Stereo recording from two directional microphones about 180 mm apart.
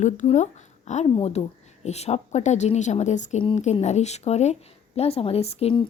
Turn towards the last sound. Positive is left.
turn(degrees=35)  # may be behind; listen again after turning